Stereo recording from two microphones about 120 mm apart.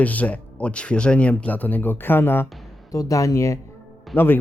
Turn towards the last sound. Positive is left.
turn(degrees=20)  # may be behind; listen again after turning